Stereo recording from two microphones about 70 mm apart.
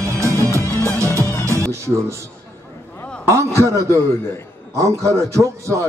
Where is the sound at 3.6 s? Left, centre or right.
Right.